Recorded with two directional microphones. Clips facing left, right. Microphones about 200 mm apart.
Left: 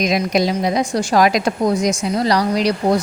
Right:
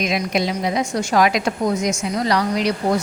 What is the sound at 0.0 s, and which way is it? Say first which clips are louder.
A woman's voice: left 4 dB; 40° left (ahead or behind).